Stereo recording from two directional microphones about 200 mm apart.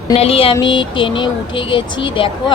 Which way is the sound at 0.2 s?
30° left (ahead or behind).